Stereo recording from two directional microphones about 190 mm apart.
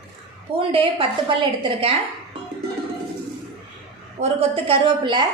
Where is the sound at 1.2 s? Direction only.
25° right (ahead or behind).